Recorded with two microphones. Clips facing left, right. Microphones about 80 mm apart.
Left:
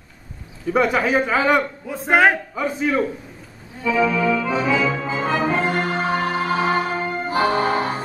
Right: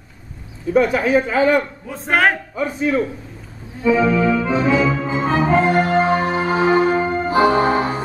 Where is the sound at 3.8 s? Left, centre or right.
Right.